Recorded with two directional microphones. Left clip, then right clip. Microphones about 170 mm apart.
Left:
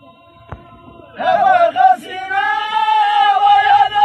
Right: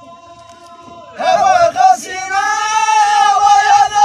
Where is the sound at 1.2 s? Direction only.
30° right (ahead or behind).